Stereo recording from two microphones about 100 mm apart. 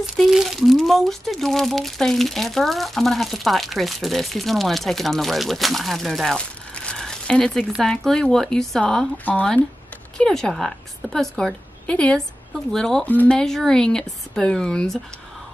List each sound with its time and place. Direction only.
0.0 s a woman's voice: 5° right (ahead or behind)
13.0 s speech: 15° left (ahead or behind)